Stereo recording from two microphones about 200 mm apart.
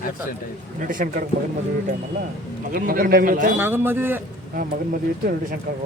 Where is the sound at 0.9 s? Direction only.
45° right (ahead or behind).